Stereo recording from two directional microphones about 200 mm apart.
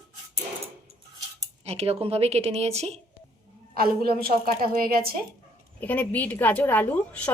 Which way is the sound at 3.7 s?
50° right (ahead or behind).